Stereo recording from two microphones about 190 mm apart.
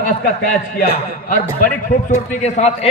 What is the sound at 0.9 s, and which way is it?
A man's voice, 45° left (ahead or behind).